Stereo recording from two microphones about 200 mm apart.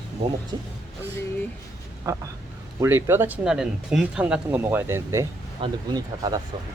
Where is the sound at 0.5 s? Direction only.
25° right (ahead or behind).